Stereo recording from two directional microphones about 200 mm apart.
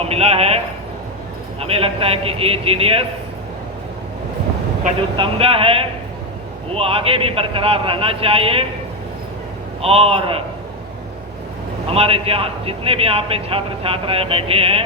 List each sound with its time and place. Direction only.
0.0 s a man's voice: 30° right (ahead or behind)
5.1 s a man's voice: 25° right (ahead or behind)
9.8 s a man's voice: 30° right (ahead or behind)
11.9 s a man's voice: 30° right (ahead or behind)